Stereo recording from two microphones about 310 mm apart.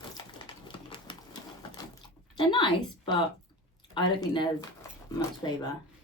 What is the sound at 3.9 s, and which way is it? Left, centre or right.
Speech, centre.